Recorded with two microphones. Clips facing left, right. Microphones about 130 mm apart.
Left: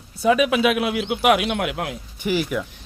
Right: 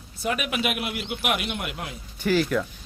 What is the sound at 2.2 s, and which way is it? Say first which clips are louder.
Speech: right 1 dB; 15° left (ahead or behind).